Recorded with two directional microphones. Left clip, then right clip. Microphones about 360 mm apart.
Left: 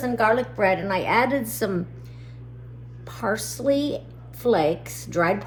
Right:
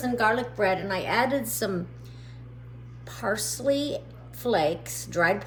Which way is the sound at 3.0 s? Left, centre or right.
Centre.